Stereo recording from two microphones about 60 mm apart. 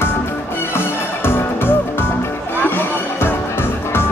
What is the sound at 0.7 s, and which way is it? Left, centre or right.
Music, left.